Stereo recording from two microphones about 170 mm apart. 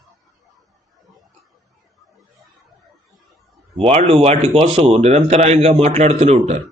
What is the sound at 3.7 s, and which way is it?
A man's voice, 35° right (ahead or behind).